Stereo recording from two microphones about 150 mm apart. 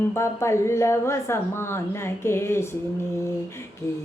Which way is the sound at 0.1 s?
20° left (ahead or behind).